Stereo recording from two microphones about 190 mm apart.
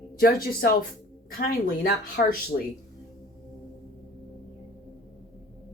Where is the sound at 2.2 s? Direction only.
55° left (ahead or behind).